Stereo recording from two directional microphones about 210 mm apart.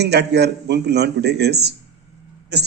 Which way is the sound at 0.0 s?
50° right (ahead or behind).